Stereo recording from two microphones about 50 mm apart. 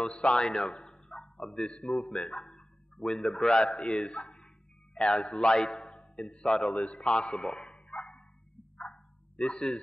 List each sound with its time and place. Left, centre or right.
0.3 s a man's voice: centre
1.9 s a man's voice: centre
7.1 s a man's voice: centre
7.7 s dog: left
8.7 s bow-wow: centre